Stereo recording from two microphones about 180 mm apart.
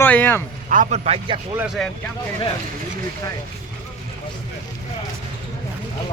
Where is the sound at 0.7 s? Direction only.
45° right (ahead or behind).